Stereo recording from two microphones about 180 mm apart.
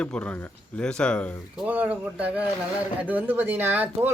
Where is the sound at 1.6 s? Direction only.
10° right (ahead or behind).